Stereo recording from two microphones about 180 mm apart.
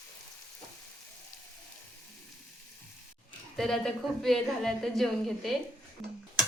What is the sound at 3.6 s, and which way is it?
A woman's voice, centre (ahead or behind).